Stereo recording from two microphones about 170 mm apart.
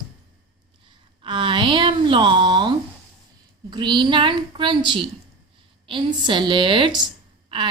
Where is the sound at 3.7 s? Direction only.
25° right (ahead or behind).